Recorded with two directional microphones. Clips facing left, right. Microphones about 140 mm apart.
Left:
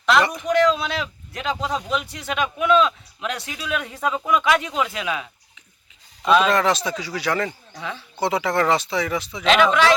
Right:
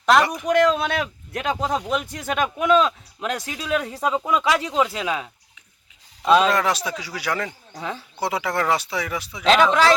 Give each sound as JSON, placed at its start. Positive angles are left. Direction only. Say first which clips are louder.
{"t": 0.4, "sound": "speech", "louder": "right 1 dB", "side_deg": -50}
{"t": 6.5, "sound": "speech", "louder": "left 2 dB", "side_deg": -10}
{"t": 7.8, "sound": "speech", "louder": "right 2 dB", "side_deg": -40}
{"t": 8.2, "sound": "speech", "louder": "left 3 dB", "side_deg": -10}
{"t": 9.4, "sound": "speech", "louder": "right 1 dB", "side_deg": -35}